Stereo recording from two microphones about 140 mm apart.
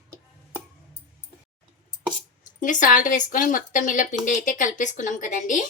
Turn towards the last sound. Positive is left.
turn(degrees=65)  # may be behind; listen again after turning